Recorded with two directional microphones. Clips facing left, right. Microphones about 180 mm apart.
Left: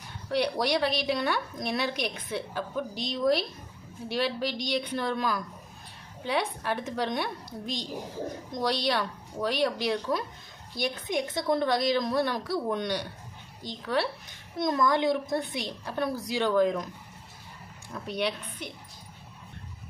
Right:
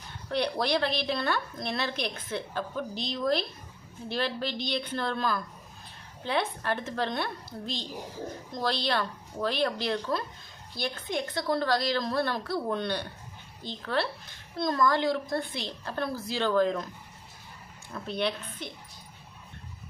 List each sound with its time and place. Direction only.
0.3 s a woman's voice: 10° left (ahead or behind)
17.9 s a woman's voice: 10° left (ahead or behind)